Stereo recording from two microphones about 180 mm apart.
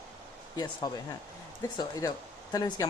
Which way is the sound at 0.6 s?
20° left (ahead or behind).